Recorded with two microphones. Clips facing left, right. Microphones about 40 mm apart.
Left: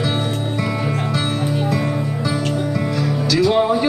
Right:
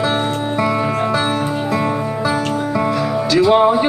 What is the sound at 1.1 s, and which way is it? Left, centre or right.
Music, right.